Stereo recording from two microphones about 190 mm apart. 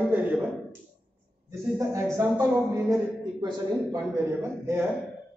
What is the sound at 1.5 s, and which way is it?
A man's voice, 15° right (ahead or behind).